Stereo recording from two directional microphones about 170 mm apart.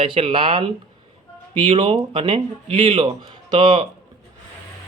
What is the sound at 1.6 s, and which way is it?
A man's voice, 30° right (ahead or behind).